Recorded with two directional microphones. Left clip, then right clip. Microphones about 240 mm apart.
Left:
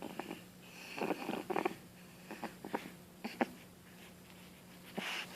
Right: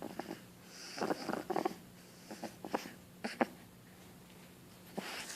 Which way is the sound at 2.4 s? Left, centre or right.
Centre.